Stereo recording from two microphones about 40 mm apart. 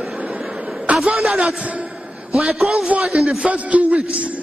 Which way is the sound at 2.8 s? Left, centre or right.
Right.